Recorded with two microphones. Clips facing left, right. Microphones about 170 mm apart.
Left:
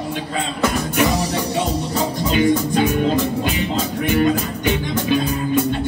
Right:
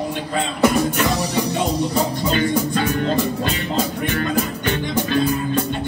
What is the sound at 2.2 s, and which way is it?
Music, 15° left (ahead or behind).